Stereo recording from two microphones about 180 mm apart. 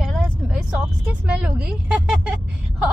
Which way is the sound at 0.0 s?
Centre (ahead or behind).